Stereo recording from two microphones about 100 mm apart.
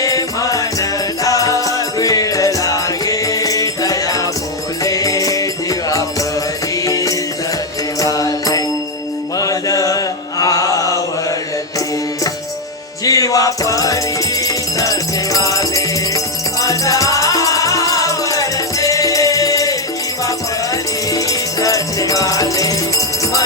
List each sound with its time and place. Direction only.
0.0 s music: 35° left (ahead or behind)
6.8 s music: 35° left (ahead or behind)
9.4 s chant: 35° left (ahead or behind)
13.1 s music: 35° left (ahead or behind)
21.1 s music: 35° left (ahead or behind)